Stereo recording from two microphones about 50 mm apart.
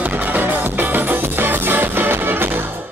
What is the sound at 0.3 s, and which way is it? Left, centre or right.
Music, right.